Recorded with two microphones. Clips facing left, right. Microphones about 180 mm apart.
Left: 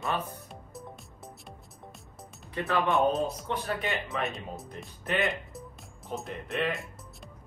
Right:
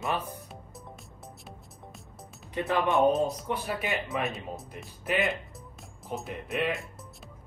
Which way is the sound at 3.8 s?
Centre (ahead or behind).